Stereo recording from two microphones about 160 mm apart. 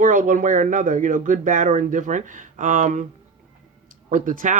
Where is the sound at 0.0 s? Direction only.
55° right (ahead or behind).